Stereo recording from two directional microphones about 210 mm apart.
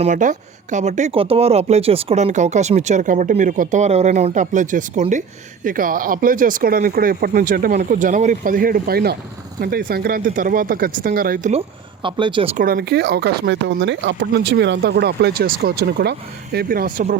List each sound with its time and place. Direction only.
0.0 s speech: 35° right (ahead or behind)
12.0 s speech: 25° right (ahead or behind)
12.5 s speech: 45° right (ahead or behind)